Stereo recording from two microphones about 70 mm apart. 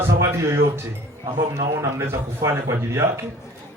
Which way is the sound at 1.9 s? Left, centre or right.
Right.